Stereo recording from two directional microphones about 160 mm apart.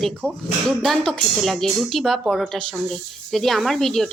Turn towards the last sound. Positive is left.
turn(degrees=0)  # may be behind; listen again after turning